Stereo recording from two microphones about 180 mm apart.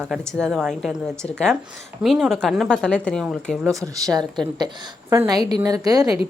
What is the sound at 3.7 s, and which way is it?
Speech, 20° right (ahead or behind).